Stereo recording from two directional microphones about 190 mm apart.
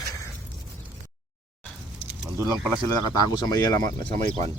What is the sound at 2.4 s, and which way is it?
Speech, 20° right (ahead or behind).